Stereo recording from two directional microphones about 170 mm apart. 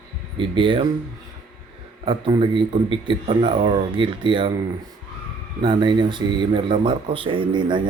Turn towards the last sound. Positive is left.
turn(degrees=-30)  # may be behind; listen again after turning